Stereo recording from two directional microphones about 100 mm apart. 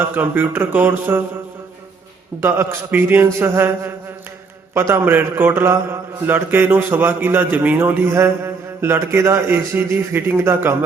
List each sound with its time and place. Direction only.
0.1 s a man's voice: 20° right (ahead or behind)
2.4 s a man's voice: 25° right (ahead or behind)